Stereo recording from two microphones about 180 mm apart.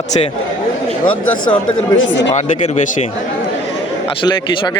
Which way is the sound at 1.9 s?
90° left.